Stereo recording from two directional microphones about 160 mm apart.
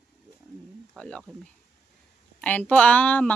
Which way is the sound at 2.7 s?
10° left (ahead or behind).